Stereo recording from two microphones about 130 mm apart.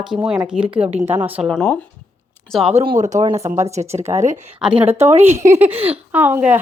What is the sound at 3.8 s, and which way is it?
A woman's voice, 55° right (ahead or behind).